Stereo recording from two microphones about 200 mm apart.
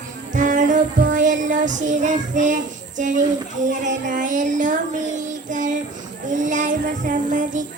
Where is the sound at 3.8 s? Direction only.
40° right (ahead or behind).